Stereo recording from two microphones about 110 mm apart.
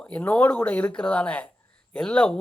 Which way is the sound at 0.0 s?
15° left (ahead or behind).